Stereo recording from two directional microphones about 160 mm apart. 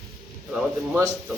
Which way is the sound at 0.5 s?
5° right (ahead or behind).